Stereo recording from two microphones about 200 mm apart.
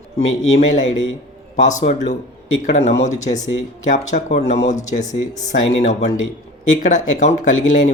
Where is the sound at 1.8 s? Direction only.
35° left (ahead or behind).